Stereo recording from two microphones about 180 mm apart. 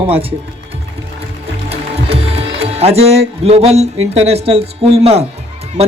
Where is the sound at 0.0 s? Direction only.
30° right (ahead or behind).